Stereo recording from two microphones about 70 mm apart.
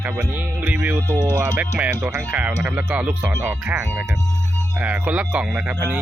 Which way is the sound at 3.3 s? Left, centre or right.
Right.